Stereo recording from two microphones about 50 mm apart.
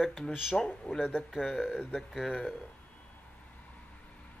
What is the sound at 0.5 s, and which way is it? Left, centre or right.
Speech, centre.